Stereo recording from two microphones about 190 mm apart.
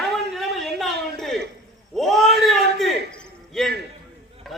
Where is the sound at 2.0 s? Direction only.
Centre (ahead or behind).